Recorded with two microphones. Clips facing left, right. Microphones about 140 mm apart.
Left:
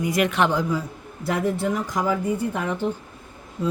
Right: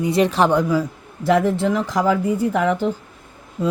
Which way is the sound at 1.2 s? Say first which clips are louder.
Right 6 dB; 90° right.